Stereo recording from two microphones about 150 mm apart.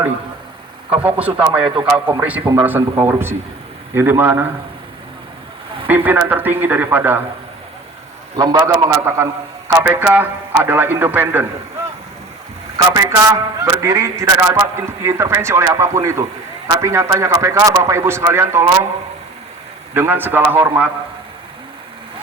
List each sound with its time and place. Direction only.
0.9 s a man's voice: 10° right (ahead or behind)
5.9 s a man's voice: 10° right (ahead or behind)
8.4 s a man's voice: 25° right (ahead or behind)
12.7 s a man's voice: 25° right (ahead or behind)
19.9 s a man's voice: 15° right (ahead or behind)